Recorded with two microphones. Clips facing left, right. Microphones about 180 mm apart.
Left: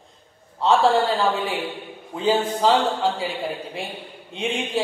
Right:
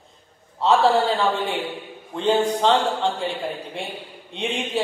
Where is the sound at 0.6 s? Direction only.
Centre (ahead or behind).